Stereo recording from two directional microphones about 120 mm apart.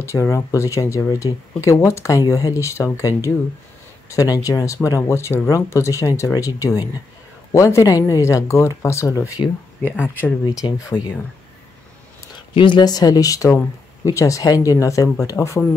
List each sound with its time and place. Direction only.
0.0 s speech: 25° left (ahead or behind)
4.1 s speech: 30° left (ahead or behind)
10.6 s speech: 35° left (ahead or behind)
12.5 s speech: 40° left (ahead or behind); by 15.6 s 25° left (ahead or behind)